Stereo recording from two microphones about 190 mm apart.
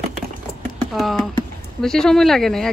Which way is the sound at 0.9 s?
Centre (ahead or behind).